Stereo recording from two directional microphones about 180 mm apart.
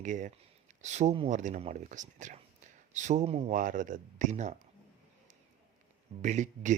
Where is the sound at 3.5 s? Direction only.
50° right (ahead or behind).